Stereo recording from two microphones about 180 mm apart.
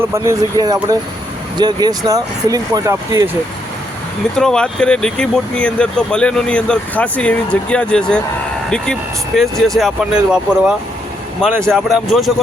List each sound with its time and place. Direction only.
0.1 s speech: 20° right (ahead or behind)
4.4 s speech: 5° left (ahead or behind)
9.4 s speech: centre (ahead or behind)